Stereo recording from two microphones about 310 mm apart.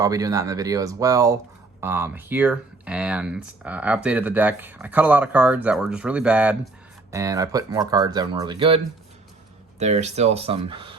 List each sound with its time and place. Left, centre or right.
0.0 s speech: centre